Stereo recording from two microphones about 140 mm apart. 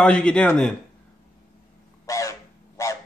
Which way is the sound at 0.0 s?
5° left (ahead or behind).